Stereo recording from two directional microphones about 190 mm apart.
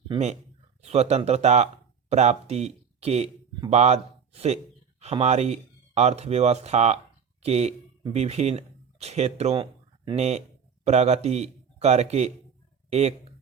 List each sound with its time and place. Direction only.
0.1 s a man's voice: 35° right (ahead or behind)